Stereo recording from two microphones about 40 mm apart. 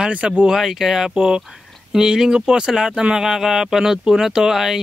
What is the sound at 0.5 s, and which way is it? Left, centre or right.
Speech, centre.